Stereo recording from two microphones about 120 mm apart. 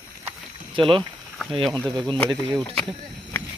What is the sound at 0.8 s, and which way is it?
Speech, 45° right (ahead or behind).